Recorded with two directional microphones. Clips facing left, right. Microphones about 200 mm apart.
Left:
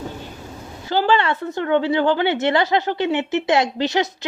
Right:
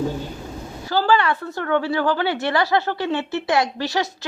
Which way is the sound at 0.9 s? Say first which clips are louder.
Left 1 dB; 25° left (ahead or behind).